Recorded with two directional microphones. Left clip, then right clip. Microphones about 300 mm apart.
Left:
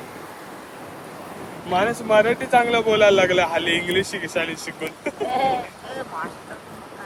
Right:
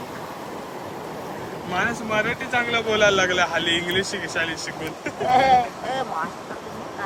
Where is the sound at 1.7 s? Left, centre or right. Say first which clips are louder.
Left 6 dB; centre.